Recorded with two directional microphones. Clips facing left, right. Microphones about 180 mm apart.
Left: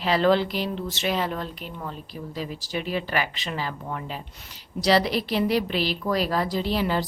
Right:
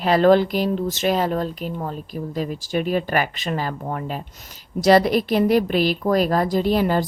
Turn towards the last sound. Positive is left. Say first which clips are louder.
# right 6 dB
turn(degrees=-50)  # may be behind; listen again after turning